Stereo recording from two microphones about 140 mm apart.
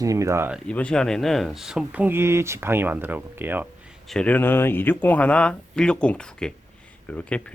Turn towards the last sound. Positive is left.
turn(degrees=10)  # may be behind; listen again after turning